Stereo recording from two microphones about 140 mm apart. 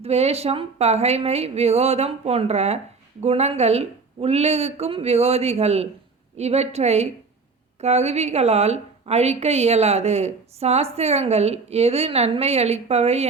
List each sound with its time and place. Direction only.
0.0 s speech: 50° right (ahead or behind)